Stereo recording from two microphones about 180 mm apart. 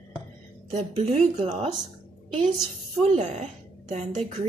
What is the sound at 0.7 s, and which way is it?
A woman's voice, 40° right (ahead or behind).